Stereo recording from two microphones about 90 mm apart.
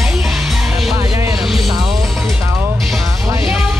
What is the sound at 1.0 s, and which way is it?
Music, 35° right (ahead or behind).